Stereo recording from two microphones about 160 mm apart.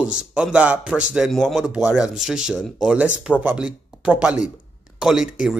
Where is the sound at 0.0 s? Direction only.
5° right (ahead or behind).